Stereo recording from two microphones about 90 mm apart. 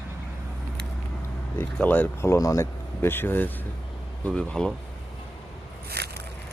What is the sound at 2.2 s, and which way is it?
Speech, 35° left (ahead or behind).